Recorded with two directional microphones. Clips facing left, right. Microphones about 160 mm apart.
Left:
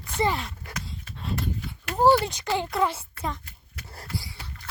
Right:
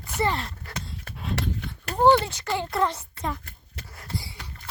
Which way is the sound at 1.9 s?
5° left (ahead or behind).